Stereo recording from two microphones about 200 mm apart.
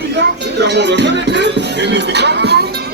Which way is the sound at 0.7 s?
60° right (ahead or behind).